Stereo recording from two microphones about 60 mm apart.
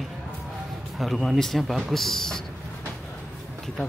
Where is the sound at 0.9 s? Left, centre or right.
Centre.